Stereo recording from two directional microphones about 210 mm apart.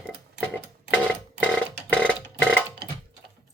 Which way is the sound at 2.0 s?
5° left (ahead or behind).